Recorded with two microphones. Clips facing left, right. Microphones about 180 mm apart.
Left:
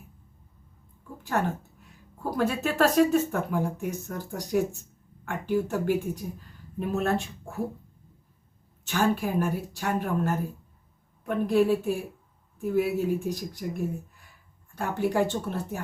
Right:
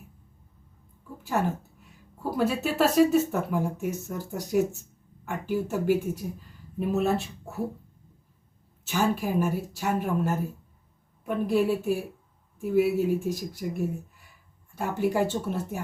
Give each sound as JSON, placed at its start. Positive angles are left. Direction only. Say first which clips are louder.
{"t": 1.2, "sound": "a woman's voice", "louder": "right 1 dB", "side_deg": -5}
{"t": 8.8, "sound": "speech", "louder": "left 1 dB", "side_deg": -5}
{"t": 14.8, "sound": "speech", "louder": "even", "side_deg": -5}